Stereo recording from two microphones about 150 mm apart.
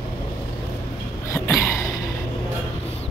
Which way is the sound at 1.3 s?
15° left (ahead or behind).